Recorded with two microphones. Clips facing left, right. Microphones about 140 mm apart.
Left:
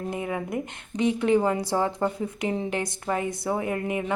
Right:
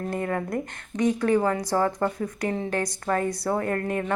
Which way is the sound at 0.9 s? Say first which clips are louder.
Even; 25° left (ahead or behind).